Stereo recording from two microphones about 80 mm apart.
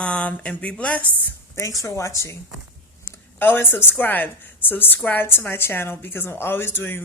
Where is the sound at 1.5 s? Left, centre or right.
Left.